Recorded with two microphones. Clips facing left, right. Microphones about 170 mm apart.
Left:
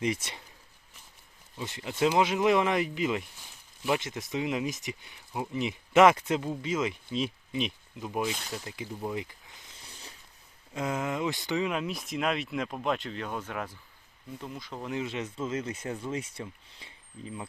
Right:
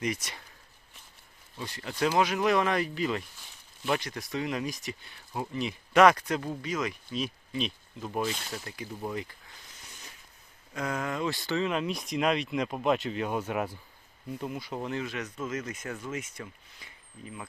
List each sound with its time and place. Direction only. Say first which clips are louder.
0.0 s speech: left 2 dB; 25° left (ahead or behind)
1.5 s speech: left 2 dB; 20° left (ahead or behind)
8.4 s speech: left 1 dB; centre (ahead or behind)
8.6 s speech: left 1 dB; 20° left (ahead or behind)
9.8 s a sound: left 2 dB; 30° left (ahead or behind)
10.8 s speech: left 1 dB; 20° left (ahead or behind)
11.7 s speech: right 2 dB; 5° left (ahead or behind)
14.9 s speech: left 1 dB; 25° left (ahead or behind)